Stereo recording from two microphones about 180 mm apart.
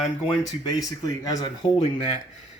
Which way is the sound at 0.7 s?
20° left (ahead or behind).